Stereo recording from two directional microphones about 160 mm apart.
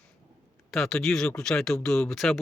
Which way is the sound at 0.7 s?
Centre (ahead or behind).